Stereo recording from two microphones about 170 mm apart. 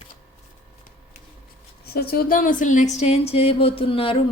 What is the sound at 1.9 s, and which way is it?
Speech, 60° left (ahead or behind).